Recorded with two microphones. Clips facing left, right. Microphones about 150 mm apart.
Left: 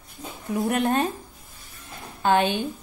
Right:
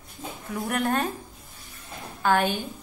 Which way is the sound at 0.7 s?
20° left (ahead or behind).